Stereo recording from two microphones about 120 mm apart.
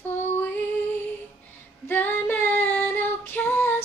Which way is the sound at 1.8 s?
15° left (ahead or behind).